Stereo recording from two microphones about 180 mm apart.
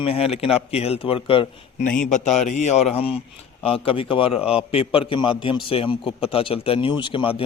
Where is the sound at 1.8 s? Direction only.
45° left (ahead or behind).